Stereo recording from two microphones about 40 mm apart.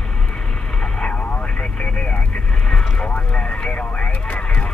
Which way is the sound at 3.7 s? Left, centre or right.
Left.